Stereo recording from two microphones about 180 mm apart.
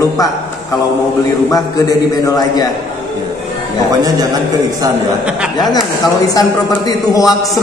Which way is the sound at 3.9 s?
20° right (ahead or behind).